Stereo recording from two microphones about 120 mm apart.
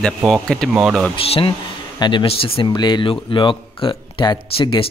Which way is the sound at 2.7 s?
40° left (ahead or behind).